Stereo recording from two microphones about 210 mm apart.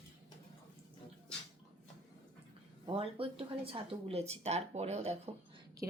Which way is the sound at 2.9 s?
25° right (ahead or behind).